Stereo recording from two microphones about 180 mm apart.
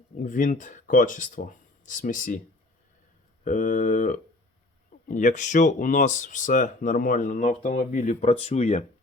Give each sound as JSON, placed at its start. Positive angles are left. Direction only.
{"t": 0.2, "sound": "speech", "side_deg": 45}
{"t": 3.4, "sound": "speech", "side_deg": 50}